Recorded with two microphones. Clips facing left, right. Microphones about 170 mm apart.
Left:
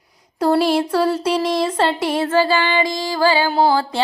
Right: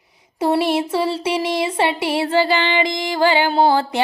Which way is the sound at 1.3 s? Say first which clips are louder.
Left 2 dB; 10° right (ahead or behind).